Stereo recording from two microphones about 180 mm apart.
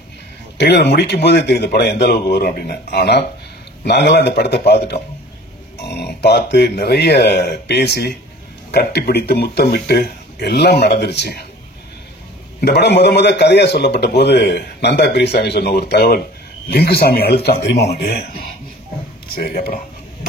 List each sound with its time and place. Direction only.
0.6 s a man's voice: 65° left (ahead or behind)
12.5 s a man's voice: 65° left (ahead or behind); by 19.8 s 50° left (ahead or behind)